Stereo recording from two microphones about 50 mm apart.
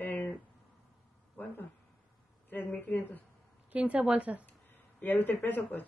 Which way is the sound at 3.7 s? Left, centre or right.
Right.